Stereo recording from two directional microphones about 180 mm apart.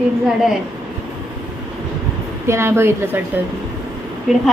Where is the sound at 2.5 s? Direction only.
15° right (ahead or behind).